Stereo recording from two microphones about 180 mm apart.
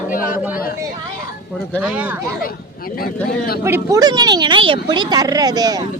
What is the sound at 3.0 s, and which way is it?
Speech, 55° left (ahead or behind).